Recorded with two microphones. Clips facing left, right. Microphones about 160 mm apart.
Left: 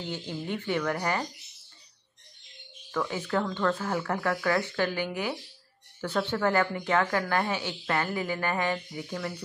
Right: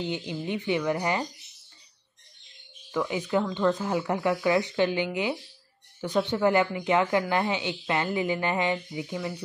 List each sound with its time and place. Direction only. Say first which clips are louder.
0.0 s speech: right 4 dB; 15° right (ahead or behind)
2.9 s speech: right 3 dB; 15° right (ahead or behind)